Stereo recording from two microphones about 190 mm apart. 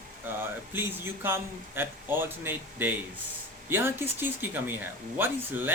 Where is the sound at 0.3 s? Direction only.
10° right (ahead or behind).